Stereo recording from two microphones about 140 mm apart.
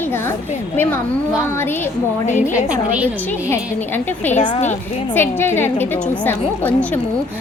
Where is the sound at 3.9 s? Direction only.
15° left (ahead or behind).